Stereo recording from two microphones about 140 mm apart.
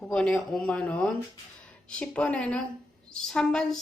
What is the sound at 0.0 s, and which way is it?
A woman's voice, 5° left (ahead or behind).